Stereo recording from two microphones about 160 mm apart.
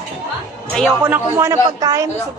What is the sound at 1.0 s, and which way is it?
A man's voice, 15° right (ahead or behind).